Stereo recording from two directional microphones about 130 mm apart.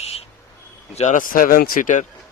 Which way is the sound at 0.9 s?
65° left (ahead or behind).